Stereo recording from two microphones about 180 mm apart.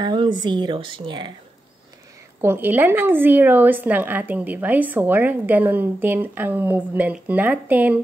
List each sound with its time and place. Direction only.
0.0 s speech: 25° right (ahead or behind)
2.4 s a woman's voice: 10° right (ahead or behind)